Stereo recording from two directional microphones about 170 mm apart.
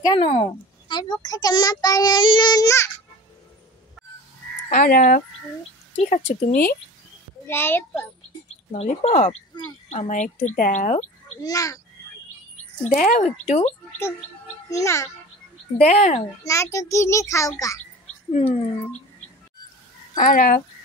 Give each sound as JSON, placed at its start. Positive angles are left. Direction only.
{"t": 0.0, "sound": "speech", "side_deg": 30}
{"t": 1.2, "sound": "child singing", "side_deg": 25}
{"t": 4.6, "sound": "speech", "side_deg": 55}
{"t": 6.0, "sound": "speech", "side_deg": 50}
{"t": 7.4, "sound": "a child's voice", "side_deg": 15}
{"t": 8.7, "sound": "speech", "side_deg": 40}
{"t": 11.4, "sound": "child singing", "side_deg": 20}
{"t": 12.8, "sound": "speech", "side_deg": 55}
{"t": 14.7, "sound": "a child's voice", "side_deg": 15}
{"t": 15.8, "sound": "speech", "side_deg": 40}
{"t": 16.4, "sound": "a child's voice", "side_deg": 20}
{"t": 18.3, "sound": "speech", "side_deg": 40}
{"t": 20.2, "sound": "speech", "side_deg": 50}